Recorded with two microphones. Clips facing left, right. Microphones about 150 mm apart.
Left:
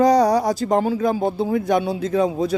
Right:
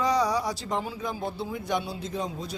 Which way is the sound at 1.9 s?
85° left.